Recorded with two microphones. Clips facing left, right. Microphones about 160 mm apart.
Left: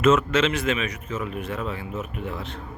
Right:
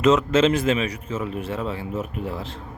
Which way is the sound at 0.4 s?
30° right (ahead or behind).